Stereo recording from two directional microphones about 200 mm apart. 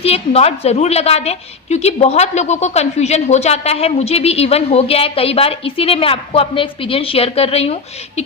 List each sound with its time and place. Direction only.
0.0 s a woman's voice: 30° left (ahead or behind)